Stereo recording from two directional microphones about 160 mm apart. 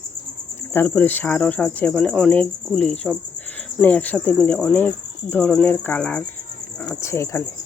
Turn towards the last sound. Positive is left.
turn(degrees=15)  # may be behind; listen again after turning